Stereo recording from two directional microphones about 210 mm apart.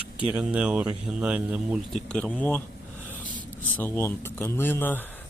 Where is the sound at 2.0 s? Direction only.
5° left (ahead or behind).